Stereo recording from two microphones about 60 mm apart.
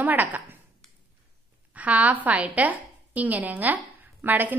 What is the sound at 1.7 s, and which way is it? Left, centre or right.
A woman's voice, right.